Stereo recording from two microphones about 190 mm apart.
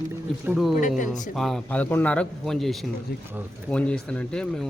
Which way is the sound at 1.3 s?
Centre (ahead or behind).